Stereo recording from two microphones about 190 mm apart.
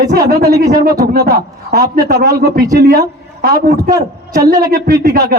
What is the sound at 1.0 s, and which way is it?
A man's voice, 55° right (ahead or behind).